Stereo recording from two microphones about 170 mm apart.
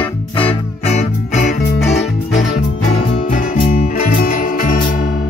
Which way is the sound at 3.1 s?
50° left (ahead or behind).